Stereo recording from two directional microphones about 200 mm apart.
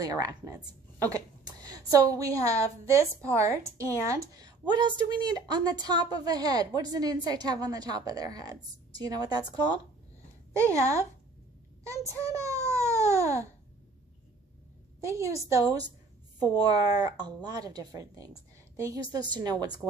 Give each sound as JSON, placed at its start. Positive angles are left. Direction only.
{"t": 0.0, "sound": "a woman's voice", "side_deg": -15}
{"t": 10.5, "sound": "a woman's voice", "side_deg": -15}
{"t": 11.8, "sound": "a sound", "side_deg": -15}
{"t": 15.0, "sound": "a woman's voice", "side_deg": -15}